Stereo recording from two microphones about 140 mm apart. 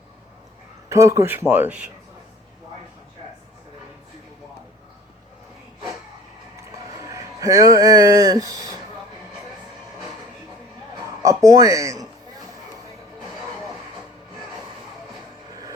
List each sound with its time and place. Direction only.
0.9 s speech: 20° right (ahead or behind)
6.6 s music: 25° right (ahead or behind)
11.2 s speech: 25° right (ahead or behind)